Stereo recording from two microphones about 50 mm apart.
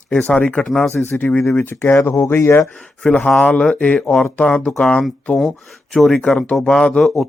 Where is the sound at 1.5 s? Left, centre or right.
Left.